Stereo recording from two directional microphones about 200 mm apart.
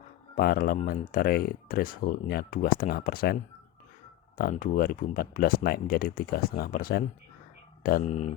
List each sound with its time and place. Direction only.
0.3 s speech: 50° left (ahead or behind)
8.0 s speech: 35° left (ahead or behind)